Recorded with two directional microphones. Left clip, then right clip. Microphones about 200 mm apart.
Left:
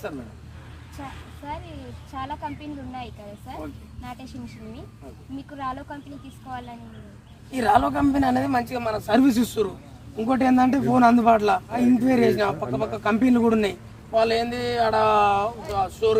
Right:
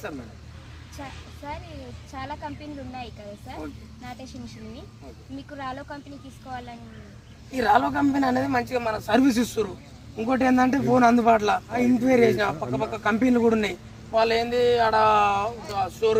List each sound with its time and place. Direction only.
2.1 s speech: 10° right (ahead or behind)
5.5 s speech: 10° right (ahead or behind)
7.5 s a man's voice: 20° left (ahead or behind)